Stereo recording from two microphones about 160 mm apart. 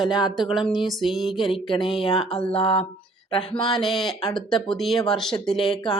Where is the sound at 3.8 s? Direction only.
Centre (ahead or behind).